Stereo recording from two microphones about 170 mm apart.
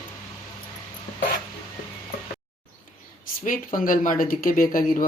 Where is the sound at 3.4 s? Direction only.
55° left (ahead or behind).